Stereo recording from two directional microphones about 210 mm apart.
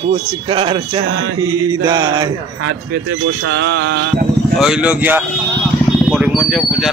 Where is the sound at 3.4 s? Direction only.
60° right (ahead or behind).